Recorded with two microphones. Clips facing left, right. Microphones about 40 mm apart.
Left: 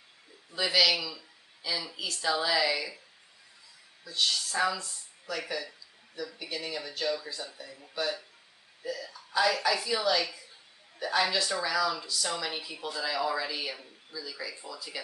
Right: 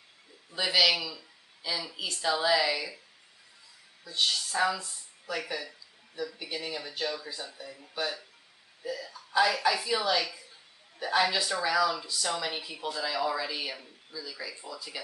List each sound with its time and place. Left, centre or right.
0.5 s speech: centre
4.0 s speech: centre
11.0 s speech: centre